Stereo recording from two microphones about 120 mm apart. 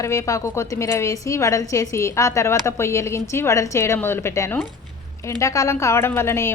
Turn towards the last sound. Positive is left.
turn(degrees=20)  # may be behind; listen again after turning